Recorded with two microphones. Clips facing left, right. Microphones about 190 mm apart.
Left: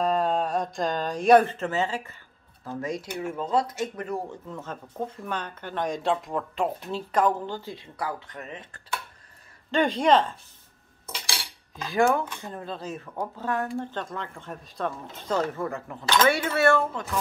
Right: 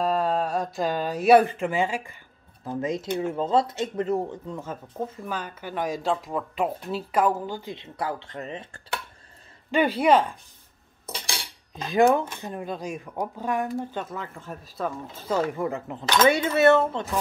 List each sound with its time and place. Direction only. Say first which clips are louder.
0.0 s speech: even; centre (ahead or behind)
7.7 s speech: right 2 dB; 25° right (ahead or behind)
9.7 s speech: right 1 dB; 10° right (ahead or behind)
11.2 s cutlery: right 1 dB; 20° right (ahead or behind)
13.7 s speech: right 1 dB; 10° right (ahead or behind); by 17.2 s 25° right (ahead or behind)